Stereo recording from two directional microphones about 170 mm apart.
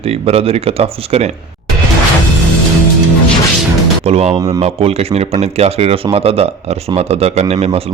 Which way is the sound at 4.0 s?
40° right (ahead or behind).